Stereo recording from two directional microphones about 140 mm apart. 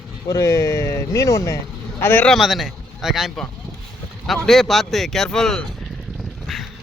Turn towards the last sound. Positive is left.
turn(degrees=5)  # may be behind; listen again after turning